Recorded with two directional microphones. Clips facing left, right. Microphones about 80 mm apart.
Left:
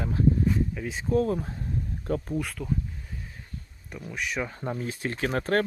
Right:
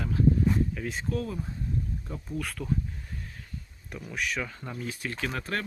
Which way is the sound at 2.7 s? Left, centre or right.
Centre.